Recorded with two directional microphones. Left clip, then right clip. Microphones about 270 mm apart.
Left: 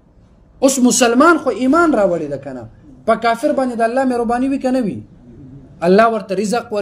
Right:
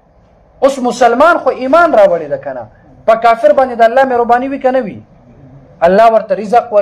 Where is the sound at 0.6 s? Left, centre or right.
Left.